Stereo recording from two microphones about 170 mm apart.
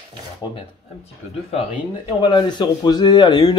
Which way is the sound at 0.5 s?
35° left (ahead or behind).